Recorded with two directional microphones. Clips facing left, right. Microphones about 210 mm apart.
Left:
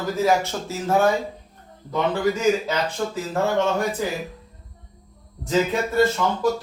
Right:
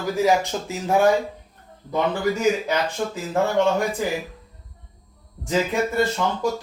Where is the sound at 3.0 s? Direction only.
15° right (ahead or behind).